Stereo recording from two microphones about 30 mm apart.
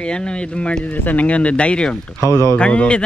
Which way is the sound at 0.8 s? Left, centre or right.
Left.